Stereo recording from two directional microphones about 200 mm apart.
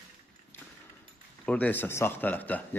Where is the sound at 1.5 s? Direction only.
5° left (ahead or behind).